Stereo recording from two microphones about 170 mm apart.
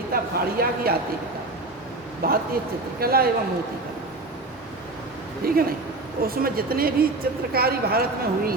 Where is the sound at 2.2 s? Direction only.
60° right (ahead or behind).